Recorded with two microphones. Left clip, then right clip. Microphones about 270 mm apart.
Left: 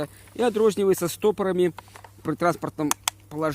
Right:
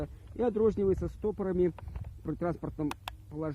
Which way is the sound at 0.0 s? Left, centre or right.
Left.